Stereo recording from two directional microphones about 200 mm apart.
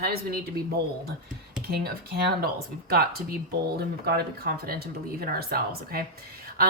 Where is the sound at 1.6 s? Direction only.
50° right (ahead or behind).